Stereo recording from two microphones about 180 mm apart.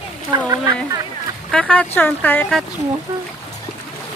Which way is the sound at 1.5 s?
5° left (ahead or behind).